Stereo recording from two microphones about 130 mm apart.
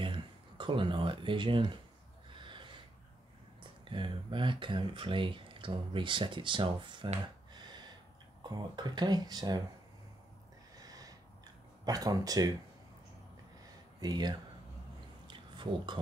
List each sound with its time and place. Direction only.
0.0 s speech: 40° right (ahead or behind)
2.3 s snort: 40° right (ahead or behind)
3.9 s speech: 40° right (ahead or behind)
8.5 s speech: 35° right (ahead or behind)
10.8 s a sound: 30° right (ahead or behind)
11.8 s speech: 30° right (ahead or behind)
13.9 s speech: 35° right (ahead or behind)
15.2 s a sound: 35° right (ahead or behind)